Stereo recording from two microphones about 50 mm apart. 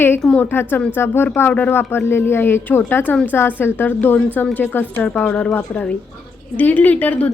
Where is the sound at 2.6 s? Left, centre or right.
Left.